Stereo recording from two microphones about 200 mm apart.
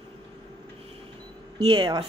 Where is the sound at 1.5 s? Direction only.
25° right (ahead or behind).